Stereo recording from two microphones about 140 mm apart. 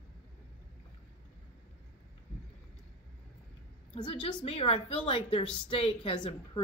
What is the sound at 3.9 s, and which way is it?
A woman's voice, 40° left (ahead or behind).